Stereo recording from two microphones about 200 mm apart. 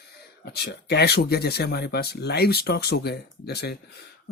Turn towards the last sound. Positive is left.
turn(degrees=55)  # may be behind; listen again after turning